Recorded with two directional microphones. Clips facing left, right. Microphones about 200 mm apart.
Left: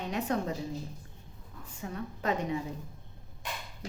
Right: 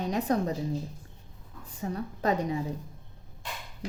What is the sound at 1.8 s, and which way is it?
Speech, 35° right (ahead or behind).